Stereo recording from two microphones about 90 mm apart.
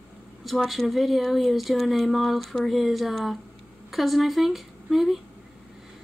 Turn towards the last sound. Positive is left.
turn(degrees=0)  # may be behind; listen again after turning